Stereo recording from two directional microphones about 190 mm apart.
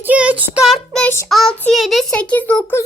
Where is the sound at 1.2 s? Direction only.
Centre (ahead or behind).